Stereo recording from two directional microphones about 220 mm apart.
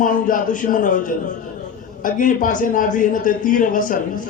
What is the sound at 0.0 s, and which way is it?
A man's voice, 40° left (ahead or behind).